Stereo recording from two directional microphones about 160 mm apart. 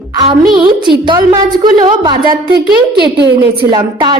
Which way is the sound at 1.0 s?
30° right (ahead or behind).